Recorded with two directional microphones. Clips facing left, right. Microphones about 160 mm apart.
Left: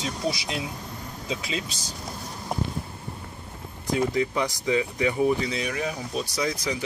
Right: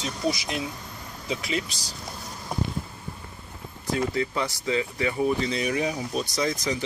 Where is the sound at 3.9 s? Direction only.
15° left (ahead or behind).